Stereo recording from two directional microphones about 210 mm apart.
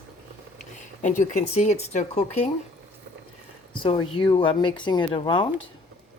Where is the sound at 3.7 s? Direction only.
25° left (ahead or behind).